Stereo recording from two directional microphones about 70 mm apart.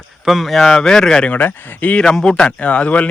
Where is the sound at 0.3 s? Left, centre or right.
Centre.